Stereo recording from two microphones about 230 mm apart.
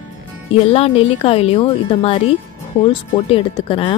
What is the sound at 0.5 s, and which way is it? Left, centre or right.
Speech, left.